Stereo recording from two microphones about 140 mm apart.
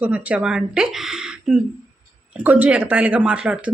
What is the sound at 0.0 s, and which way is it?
A woman's voice, 10° right (ahead or behind).